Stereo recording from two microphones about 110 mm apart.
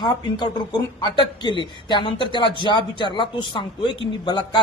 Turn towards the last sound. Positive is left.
turn(degrees=45)  # may be behind; listen again after turning